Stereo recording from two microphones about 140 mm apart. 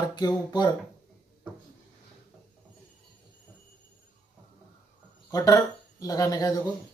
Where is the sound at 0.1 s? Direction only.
30° left (ahead or behind).